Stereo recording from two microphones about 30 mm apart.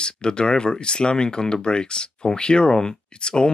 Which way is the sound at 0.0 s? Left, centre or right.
Left.